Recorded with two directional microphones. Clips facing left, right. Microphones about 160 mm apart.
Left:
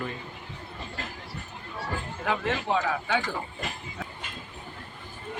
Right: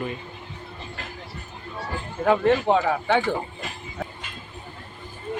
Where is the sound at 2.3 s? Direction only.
50° right (ahead or behind).